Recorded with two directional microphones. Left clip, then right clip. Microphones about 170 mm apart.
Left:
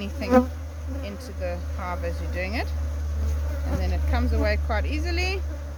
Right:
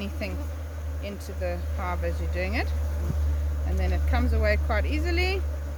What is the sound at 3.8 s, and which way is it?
Speech, 10° left (ahead or behind).